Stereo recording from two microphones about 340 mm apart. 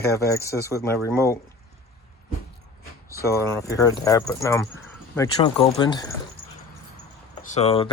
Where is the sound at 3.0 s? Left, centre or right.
Centre.